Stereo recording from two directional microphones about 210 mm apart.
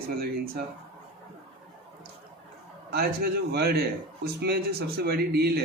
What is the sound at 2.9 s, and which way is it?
A man's voice, 50° right (ahead or behind).